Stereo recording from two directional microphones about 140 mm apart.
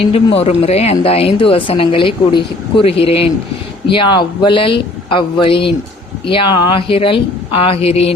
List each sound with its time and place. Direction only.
0.0 s speech: 45° left (ahead or behind)